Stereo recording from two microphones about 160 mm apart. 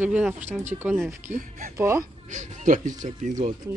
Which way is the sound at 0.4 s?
45° right (ahead or behind).